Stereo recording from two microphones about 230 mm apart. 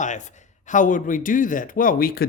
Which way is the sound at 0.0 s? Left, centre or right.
Left.